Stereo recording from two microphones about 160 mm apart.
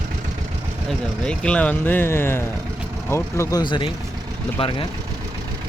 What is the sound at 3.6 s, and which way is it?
Speech, 30° left (ahead or behind).